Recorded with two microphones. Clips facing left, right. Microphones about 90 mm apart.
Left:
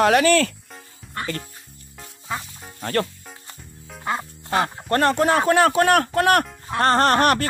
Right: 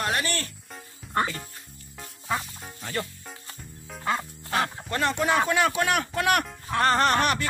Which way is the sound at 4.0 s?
20° left (ahead or behind).